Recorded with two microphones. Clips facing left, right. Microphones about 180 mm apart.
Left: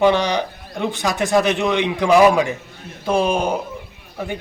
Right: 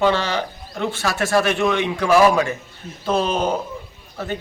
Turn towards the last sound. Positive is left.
turn(degrees=15)  # may be behind; listen again after turning